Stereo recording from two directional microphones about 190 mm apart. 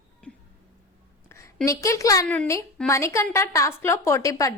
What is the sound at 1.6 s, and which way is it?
A woman's voice, 15° left (ahead or behind).